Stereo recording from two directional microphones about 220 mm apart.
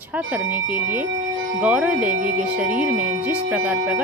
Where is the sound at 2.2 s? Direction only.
40° right (ahead or behind).